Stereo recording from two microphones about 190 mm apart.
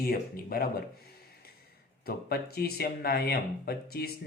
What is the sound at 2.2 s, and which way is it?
Speech, 55° left (ahead or behind).